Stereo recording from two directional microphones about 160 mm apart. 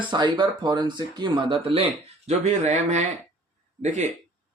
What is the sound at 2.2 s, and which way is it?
Speech, 45° right (ahead or behind).